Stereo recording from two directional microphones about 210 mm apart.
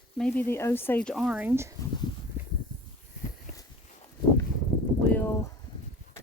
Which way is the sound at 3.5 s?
35° left (ahead or behind).